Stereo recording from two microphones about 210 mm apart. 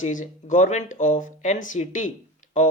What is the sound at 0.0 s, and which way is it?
Speech, 35° left (ahead or behind).